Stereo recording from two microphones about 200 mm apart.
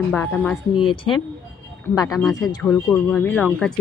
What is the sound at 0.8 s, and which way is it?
Speech, 25° left (ahead or behind).